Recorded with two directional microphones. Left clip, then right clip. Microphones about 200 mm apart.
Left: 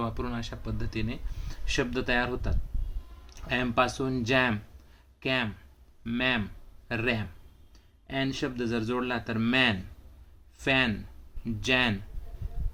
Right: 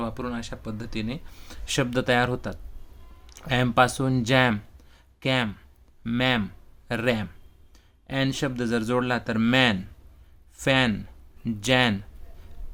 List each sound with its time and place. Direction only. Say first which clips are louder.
0.0 s a man's voice: right 2 dB; 20° right (ahead or behind)